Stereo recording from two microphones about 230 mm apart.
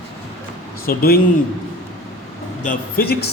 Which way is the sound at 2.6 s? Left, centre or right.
Left.